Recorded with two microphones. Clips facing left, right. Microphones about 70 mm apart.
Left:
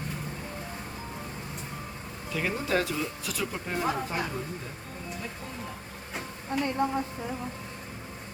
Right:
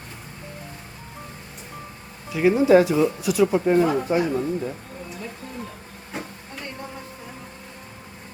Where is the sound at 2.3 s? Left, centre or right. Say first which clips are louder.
Right 13 dB; centre.